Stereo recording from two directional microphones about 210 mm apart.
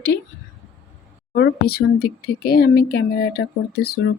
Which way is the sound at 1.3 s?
50° left (ahead or behind).